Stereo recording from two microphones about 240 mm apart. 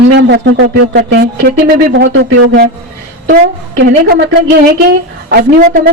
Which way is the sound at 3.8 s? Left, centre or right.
Right.